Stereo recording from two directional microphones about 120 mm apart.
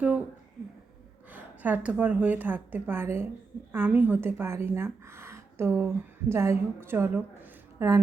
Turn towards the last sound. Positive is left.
turn(degrees=-25)  # may be behind; listen again after turning